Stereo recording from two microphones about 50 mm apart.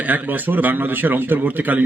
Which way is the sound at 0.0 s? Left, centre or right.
Right.